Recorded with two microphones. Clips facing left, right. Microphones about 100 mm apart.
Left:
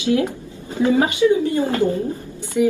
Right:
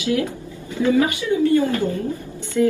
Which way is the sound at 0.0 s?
25° left (ahead or behind).